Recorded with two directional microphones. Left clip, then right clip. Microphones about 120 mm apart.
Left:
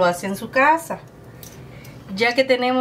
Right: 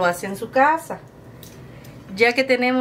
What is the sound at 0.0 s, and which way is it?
Speech, 25° right (ahead or behind).